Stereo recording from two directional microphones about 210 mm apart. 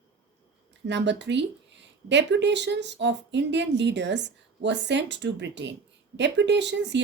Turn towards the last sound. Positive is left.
turn(degrees=-55)  # may be behind; listen again after turning